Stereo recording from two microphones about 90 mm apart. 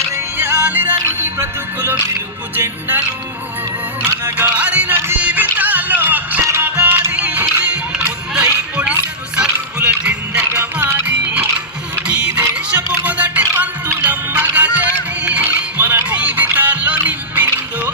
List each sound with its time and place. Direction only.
0.3 s music: 20° right (ahead or behind)
4.0 s music: 15° right (ahead or behind)